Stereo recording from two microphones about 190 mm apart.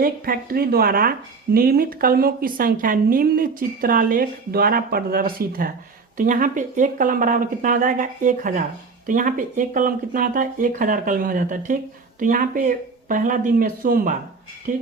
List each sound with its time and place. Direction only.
0.0 s a woman's voice: 50° right (ahead or behind)